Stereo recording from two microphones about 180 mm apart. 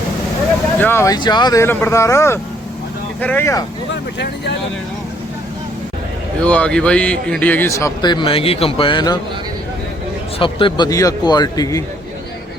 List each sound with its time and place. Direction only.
0.8 s speech: 15° left (ahead or behind)
6.4 s speech: 5° left (ahead or behind); by 9.1 s 25° left (ahead or behind)
10.3 s a man's voice: 30° left (ahead or behind)